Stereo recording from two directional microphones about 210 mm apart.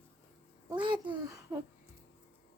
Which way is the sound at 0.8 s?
20° right (ahead or behind).